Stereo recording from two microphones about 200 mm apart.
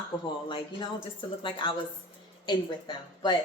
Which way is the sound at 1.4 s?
25° left (ahead or behind).